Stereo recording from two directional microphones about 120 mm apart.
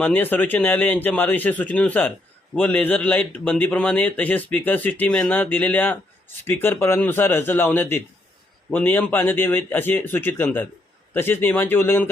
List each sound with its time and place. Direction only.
0.0 s a man's voice: 15° left (ahead or behind)